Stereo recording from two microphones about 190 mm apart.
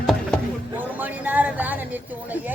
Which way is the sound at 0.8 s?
10° right (ahead or behind).